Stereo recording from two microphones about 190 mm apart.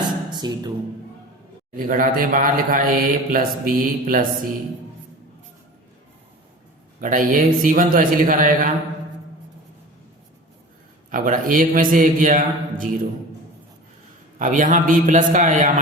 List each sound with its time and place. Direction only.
0.3 s speech: 20° right (ahead or behind)
1.7 s a man's voice: 45° right (ahead or behind)
7.0 s a man's voice: 45° right (ahead or behind)
11.1 s a man's voice: 45° right (ahead or behind)
14.3 s a man's voice: 45° right (ahead or behind)